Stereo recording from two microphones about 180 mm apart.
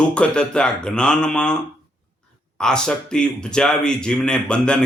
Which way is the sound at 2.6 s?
5° left (ahead or behind).